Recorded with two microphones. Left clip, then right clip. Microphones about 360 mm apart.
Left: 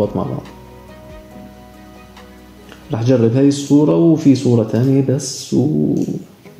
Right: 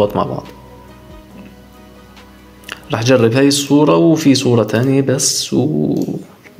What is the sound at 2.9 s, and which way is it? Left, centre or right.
Speech, right.